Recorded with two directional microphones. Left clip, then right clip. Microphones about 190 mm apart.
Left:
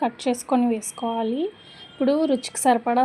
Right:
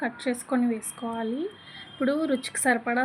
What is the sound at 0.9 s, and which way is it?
A woman's voice, 20° left (ahead or behind).